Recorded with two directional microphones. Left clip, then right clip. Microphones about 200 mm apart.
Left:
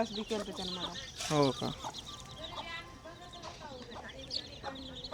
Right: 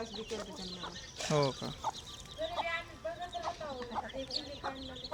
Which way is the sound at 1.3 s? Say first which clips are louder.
Left 2 dB; 5° left (ahead or behind).